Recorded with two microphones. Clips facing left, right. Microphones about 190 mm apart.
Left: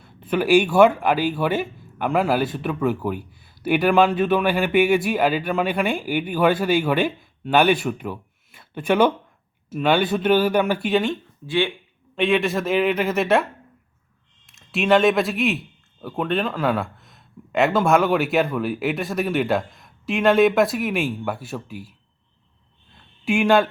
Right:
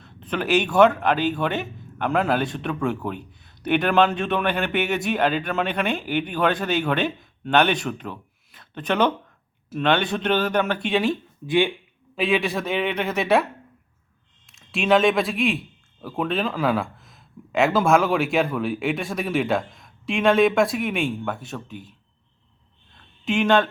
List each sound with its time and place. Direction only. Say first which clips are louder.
0.0 s speech: left 5 dB; 10° left (ahead or behind)
11.4 s speech: right 2 dB; 15° right (ahead or behind)
12.1 s a man's voice: left 2 dB; centre (ahead or behind)
14.4 s a man's voice: left 2 dB; centre (ahead or behind)
23.2 s speech: left 2 dB; 10° left (ahead or behind)